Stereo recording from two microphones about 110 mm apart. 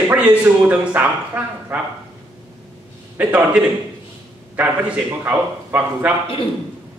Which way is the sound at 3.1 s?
15° right (ahead or behind).